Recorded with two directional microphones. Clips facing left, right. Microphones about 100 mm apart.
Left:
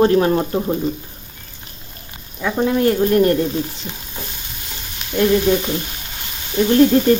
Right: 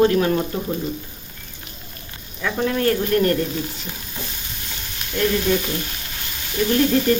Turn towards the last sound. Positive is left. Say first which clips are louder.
# left 5 dB
turn(degrees=25)  # may be behind; listen again after turning